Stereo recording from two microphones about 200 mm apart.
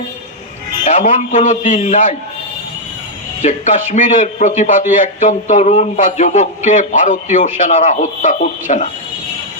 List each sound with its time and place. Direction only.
0.9 s a man's voice: 35° left (ahead or behind)
3.4 s a man's voice: 35° left (ahead or behind)